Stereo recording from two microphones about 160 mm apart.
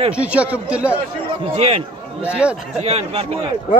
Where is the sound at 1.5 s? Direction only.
40° right (ahead or behind).